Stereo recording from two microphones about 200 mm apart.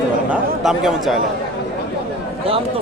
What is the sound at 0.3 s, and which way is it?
Speech, centre (ahead or behind).